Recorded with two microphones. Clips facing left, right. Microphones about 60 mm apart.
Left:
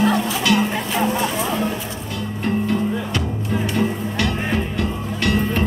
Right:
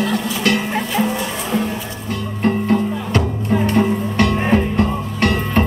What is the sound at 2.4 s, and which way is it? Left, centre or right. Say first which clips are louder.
Music: right 4 dB; right.